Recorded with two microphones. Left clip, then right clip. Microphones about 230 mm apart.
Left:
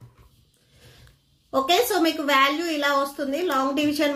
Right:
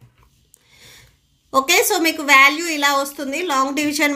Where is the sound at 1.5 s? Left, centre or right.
Right.